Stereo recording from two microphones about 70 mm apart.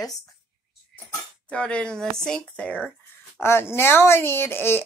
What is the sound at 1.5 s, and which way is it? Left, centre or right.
Speech, centre.